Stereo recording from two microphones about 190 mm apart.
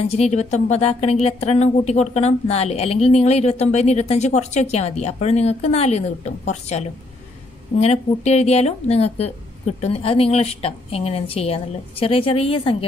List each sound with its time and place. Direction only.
0.0 s speech: 35° left (ahead or behind)